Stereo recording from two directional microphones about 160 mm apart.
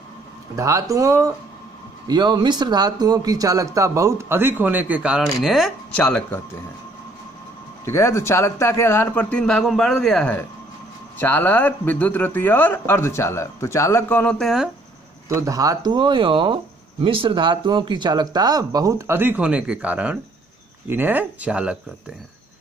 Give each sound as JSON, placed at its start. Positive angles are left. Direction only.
{"t": 0.6, "sound": "a man's voice", "side_deg": -20}
{"t": 7.8, "sound": "a man's voice", "side_deg": 15}
{"t": 14.4, "sound": "speech", "side_deg": 0}
{"t": 15.2, "sound": "speech", "side_deg": -20}